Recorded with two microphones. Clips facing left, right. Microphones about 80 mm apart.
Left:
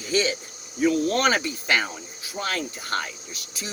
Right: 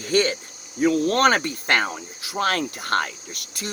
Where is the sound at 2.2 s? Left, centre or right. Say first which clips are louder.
Right 6 dB; right.